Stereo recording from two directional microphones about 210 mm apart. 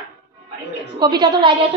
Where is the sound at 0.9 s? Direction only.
20° right (ahead or behind).